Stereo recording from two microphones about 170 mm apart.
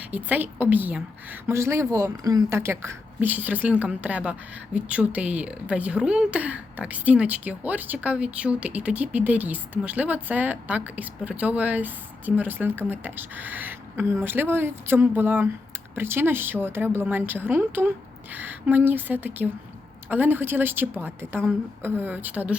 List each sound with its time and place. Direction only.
0.1 s a woman's voice: 10° right (ahead or behind)